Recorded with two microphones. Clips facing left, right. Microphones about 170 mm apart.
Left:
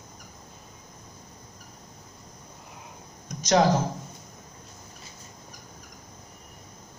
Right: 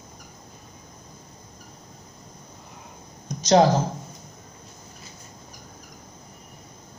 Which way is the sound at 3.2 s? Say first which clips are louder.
Right 4 dB; 30° right (ahead or behind).